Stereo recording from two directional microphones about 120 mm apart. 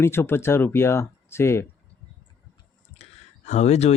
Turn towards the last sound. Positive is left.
turn(degrees=65)  # may be behind; listen again after turning